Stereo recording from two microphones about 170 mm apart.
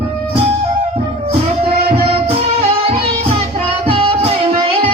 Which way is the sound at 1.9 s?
35° right (ahead or behind).